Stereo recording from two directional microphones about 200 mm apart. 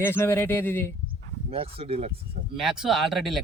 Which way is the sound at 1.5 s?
30° right (ahead or behind).